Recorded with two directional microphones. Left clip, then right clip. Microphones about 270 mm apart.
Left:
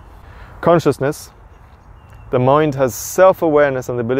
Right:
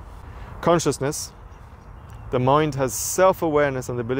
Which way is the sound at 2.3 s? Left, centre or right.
Left.